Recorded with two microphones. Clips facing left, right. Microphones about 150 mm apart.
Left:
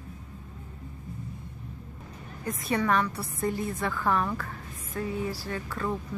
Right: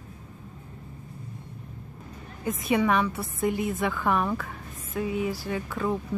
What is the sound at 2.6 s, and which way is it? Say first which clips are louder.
Speech: right 3 dB; 15° right (ahead or behind).